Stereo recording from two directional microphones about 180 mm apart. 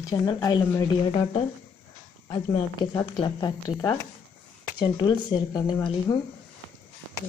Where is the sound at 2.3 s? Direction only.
25° left (ahead or behind).